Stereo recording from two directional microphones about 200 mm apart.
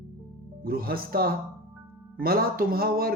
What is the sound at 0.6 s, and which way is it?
A man's voice, 45° right (ahead or behind).